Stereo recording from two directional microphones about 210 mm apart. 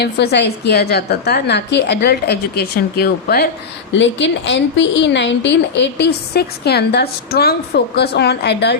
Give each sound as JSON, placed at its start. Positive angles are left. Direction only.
{"t": 0.0, "sound": "a woman's voice", "side_deg": 50}
{"t": 3.9, "sound": "a woman's voice", "side_deg": 60}